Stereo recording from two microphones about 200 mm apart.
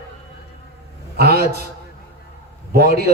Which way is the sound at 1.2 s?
50° right (ahead or behind).